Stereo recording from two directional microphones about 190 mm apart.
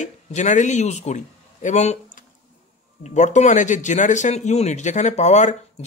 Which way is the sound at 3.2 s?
40° left (ahead or behind).